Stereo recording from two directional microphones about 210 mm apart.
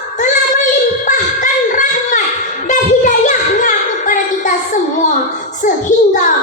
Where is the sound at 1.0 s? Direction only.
35° left (ahead or behind).